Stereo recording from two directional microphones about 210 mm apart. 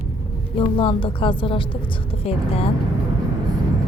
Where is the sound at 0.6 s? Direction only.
25° left (ahead or behind).